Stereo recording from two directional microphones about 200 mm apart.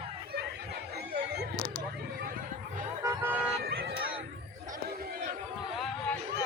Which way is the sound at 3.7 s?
50° right (ahead or behind).